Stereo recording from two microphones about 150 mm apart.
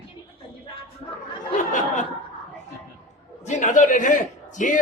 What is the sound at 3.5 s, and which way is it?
A man's voice, 55° left (ahead or behind).